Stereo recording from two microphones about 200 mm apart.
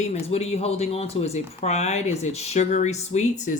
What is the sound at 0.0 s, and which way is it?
Speech, 30° left (ahead or behind).